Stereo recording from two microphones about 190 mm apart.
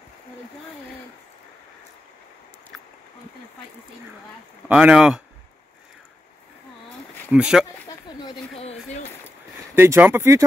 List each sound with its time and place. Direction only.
4.6 s speech: 5° right (ahead or behind)
7.2 s speech: 5° right (ahead or behind)
8.2 s speech: 30° left (ahead or behind)
9.8 s speech: 10° right (ahead or behind)